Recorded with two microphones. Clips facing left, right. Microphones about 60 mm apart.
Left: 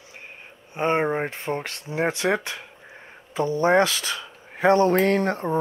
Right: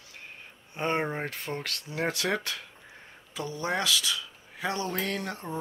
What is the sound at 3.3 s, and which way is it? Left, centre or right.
Speech, left.